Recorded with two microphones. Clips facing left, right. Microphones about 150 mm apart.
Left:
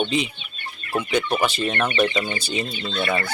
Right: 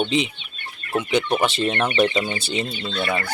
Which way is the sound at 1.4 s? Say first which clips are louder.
Right 1 dB; 25° right (ahead or behind).